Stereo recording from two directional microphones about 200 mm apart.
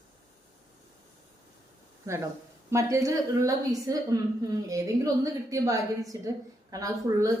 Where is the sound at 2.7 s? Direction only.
15° right (ahead or behind).